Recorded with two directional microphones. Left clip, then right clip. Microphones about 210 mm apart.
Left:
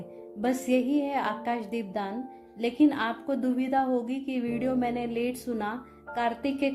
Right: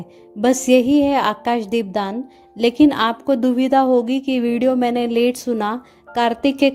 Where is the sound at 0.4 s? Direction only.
40° right (ahead or behind).